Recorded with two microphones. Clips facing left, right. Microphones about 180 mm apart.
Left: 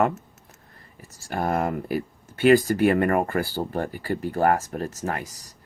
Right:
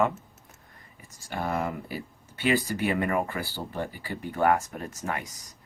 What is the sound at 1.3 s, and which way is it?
Speech, 50° left (ahead or behind).